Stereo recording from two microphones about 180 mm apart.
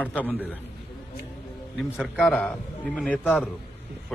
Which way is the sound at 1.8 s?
Centre (ahead or behind).